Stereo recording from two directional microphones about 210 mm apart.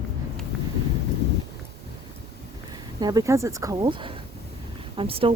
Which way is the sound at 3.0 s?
20° right (ahead or behind).